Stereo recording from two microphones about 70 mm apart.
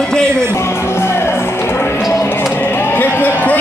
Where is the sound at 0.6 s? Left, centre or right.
Left.